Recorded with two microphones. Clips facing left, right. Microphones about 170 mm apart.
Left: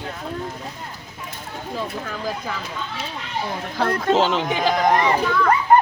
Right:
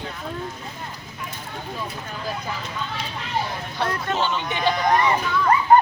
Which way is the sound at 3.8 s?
90° left.